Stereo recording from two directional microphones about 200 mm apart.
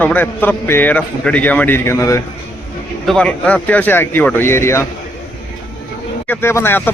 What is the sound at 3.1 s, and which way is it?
A man's voice, 5° left (ahead or behind).